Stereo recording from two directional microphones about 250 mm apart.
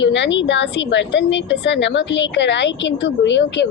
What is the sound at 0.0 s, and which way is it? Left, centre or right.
A woman's voice, left.